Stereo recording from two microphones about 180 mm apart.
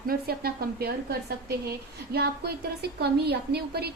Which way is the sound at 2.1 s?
65° right (ahead or behind).